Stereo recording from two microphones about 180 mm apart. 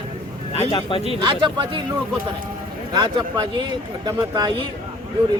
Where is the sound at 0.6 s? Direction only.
20° left (ahead or behind).